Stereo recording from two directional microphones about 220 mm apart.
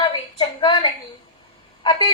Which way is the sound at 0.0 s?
20° left (ahead or behind).